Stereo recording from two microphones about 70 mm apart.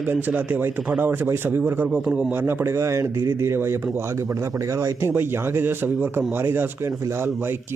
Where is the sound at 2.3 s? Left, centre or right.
Right.